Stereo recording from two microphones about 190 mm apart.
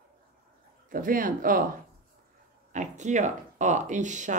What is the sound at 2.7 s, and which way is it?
A woman's voice, 40° right (ahead or behind).